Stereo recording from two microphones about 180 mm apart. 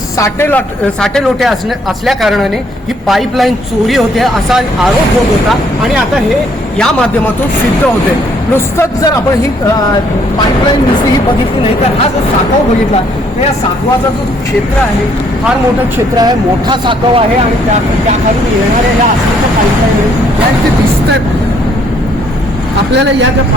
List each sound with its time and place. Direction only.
0.2 s a man's voice: 10° left (ahead or behind)
1.0 s a man's voice: centre (ahead or behind)
16.1 s speech: 25° right (ahead or behind)